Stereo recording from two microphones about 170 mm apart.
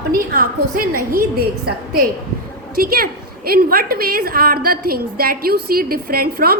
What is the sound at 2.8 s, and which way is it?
A woman's voice, 60° right (ahead or behind).